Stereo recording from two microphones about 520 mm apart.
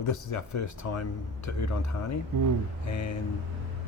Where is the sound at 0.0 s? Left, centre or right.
Left.